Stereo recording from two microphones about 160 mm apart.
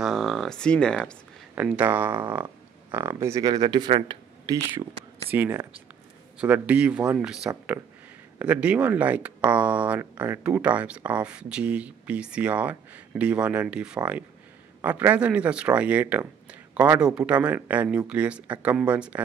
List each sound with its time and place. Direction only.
0.0 s speech: centre (ahead or behind)
1.5 s speech: 10° right (ahead or behind); by 4.6 s 30° right (ahead or behind)
5.3 s speech: 15° right (ahead or behind)